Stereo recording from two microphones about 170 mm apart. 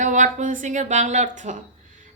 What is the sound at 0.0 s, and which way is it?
A woman's voice, 45° right (ahead or behind).